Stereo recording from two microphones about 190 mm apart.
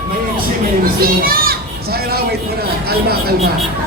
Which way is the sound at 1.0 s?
50° right (ahead or behind).